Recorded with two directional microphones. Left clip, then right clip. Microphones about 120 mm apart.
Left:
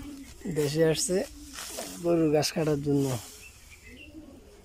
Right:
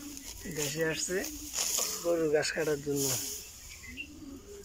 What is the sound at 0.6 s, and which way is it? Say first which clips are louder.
Speech: left 7 dB; 40° left (ahead or behind).